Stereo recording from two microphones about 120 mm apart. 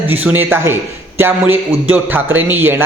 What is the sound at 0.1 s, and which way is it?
A man's voice, 15° right (ahead or behind).